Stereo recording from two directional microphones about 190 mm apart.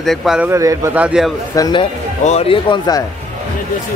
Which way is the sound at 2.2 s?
30° left (ahead or behind).